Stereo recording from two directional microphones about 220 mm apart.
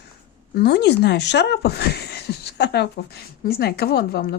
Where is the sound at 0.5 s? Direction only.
45° left (ahead or behind).